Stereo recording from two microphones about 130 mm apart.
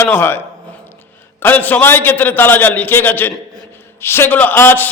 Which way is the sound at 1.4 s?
15° left (ahead or behind).